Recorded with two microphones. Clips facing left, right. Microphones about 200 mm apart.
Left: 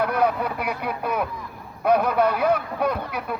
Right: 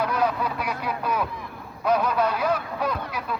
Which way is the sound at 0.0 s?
60° left (ahead or behind).